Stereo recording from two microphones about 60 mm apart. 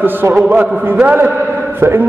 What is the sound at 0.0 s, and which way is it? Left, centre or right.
A man's voice, right.